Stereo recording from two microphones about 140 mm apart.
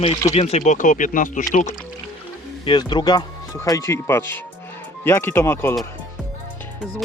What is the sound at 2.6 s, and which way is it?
Speech, 30° left (ahead or behind).